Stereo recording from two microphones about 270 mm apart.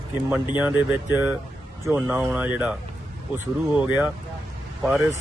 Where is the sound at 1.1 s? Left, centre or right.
Centre.